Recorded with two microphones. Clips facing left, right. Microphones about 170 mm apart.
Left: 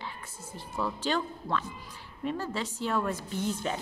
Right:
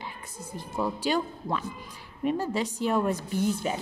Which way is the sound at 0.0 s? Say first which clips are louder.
Right 2 dB; 15° right (ahead or behind).